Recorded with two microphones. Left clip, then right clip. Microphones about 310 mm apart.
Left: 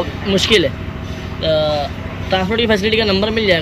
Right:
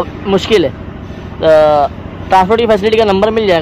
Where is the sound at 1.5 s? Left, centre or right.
Right.